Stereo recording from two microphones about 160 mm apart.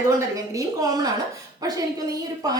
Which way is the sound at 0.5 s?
20° right (ahead or behind).